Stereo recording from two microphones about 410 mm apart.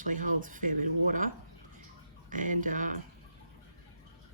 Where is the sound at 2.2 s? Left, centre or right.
Centre.